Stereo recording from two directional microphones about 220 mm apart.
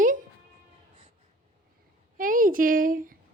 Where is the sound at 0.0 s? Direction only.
35° right (ahead or behind).